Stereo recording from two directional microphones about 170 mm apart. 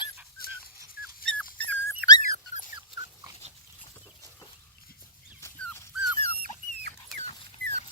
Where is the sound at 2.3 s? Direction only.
45° left (ahead or behind).